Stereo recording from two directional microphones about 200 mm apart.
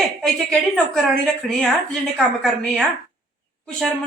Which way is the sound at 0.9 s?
Centre (ahead or behind).